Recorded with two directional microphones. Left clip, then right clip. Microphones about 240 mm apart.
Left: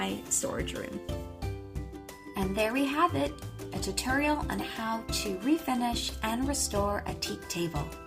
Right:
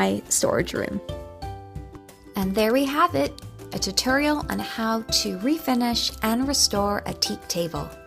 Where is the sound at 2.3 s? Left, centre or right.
Right.